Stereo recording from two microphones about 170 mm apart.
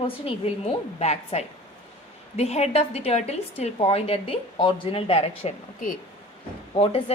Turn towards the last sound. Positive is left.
turn(degrees=35)  # may be behind; listen again after turning